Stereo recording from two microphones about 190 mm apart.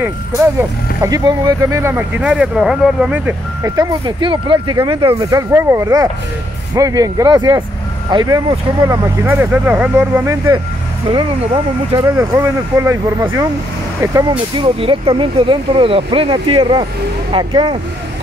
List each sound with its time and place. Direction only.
0.6 s speech: 15° right (ahead or behind)
5.5 s speech: 15° right (ahead or behind)
14.3 s speech: 30° right (ahead or behind)